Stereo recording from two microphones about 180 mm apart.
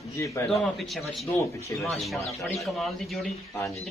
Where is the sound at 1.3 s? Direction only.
15° left (ahead or behind).